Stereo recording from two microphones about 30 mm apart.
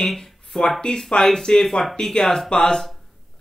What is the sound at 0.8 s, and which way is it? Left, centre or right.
Speech, left.